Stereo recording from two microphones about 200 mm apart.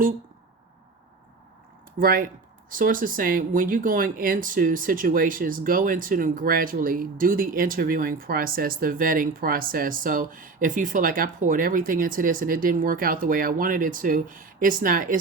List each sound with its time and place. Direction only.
2.0 s speech: 45° right (ahead or behind)